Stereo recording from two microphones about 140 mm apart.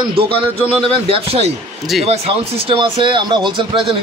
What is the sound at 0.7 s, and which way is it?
A man's voice, 45° right (ahead or behind).